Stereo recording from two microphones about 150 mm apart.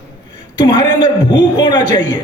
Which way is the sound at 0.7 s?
30° left (ahead or behind).